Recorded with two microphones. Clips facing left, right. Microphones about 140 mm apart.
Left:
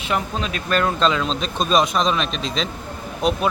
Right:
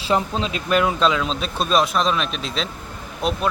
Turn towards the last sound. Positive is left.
turn(degrees=0)  # may be behind; listen again after turning